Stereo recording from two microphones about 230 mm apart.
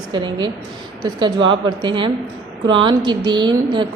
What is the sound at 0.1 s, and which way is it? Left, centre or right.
Speech, centre.